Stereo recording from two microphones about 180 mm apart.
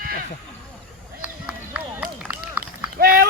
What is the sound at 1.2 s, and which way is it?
Run, 5° right (ahead or behind).